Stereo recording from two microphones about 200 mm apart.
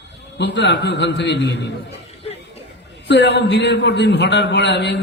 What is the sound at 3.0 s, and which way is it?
A man's voice, 60° left (ahead or behind).